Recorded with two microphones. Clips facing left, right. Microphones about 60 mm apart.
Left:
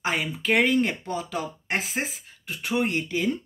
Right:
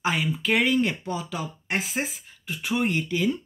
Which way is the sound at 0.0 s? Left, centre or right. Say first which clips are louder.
Right 1 dB; left.